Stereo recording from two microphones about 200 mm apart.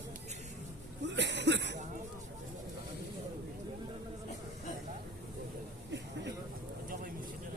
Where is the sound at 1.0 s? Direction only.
60° right (ahead or behind).